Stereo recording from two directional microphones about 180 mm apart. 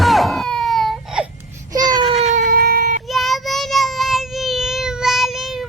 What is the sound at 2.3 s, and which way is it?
Cat, 50° right (ahead or behind).